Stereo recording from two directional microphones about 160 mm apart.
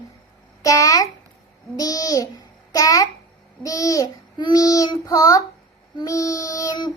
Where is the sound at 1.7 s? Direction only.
20° left (ahead or behind).